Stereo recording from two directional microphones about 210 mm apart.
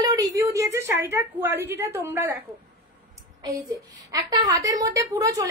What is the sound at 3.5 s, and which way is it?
A woman's voice, 15° right (ahead or behind).